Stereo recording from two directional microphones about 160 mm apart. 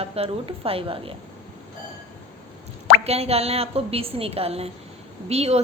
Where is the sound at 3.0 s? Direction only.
40° right (ahead or behind).